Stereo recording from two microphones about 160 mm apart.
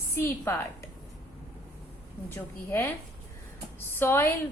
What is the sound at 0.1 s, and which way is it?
Speech, 15° left (ahead or behind).